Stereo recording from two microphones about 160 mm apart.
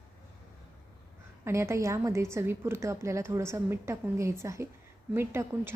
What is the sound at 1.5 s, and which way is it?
A woman's voice, 15° right (ahead or behind).